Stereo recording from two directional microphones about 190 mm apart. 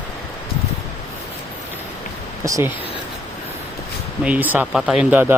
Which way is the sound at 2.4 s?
15° right (ahead or behind).